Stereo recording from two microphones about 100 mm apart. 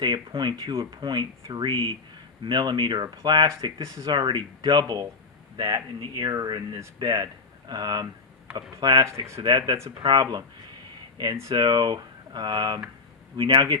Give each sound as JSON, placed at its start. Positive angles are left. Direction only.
{"t": 0.0, "sound": "speech", "side_deg": -50}
{"t": 4.0, "sound": "speech", "side_deg": -50}